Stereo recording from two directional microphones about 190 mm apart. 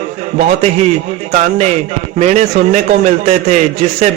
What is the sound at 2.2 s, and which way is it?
A man's voice, 40° right (ahead or behind).